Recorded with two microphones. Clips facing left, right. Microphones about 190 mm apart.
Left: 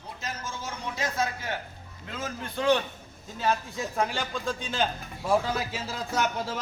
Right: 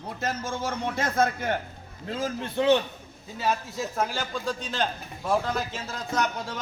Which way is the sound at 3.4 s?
5° right (ahead or behind).